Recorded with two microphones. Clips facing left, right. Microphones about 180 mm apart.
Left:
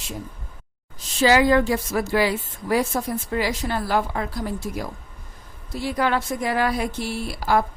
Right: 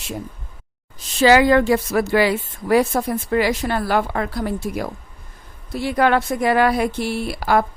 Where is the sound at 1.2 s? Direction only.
65° right (ahead or behind).